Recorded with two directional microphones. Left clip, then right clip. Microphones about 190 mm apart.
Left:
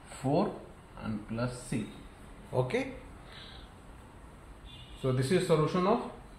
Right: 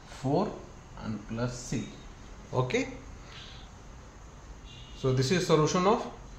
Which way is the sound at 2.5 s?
15° right (ahead or behind).